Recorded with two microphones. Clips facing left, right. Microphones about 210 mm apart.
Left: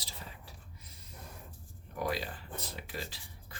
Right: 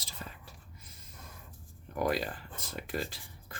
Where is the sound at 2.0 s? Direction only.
50° right (ahead or behind).